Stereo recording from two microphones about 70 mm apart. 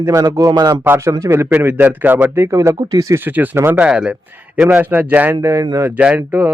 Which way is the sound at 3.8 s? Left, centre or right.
Centre.